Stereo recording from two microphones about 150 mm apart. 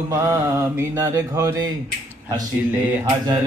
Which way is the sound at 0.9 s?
20° right (ahead or behind).